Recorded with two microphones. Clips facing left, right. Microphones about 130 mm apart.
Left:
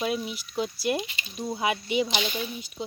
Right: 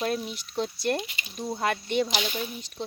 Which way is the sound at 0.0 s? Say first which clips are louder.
Even; 5° left (ahead or behind).